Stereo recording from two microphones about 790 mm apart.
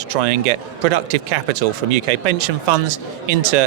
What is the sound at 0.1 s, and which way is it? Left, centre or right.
A man's voice, right.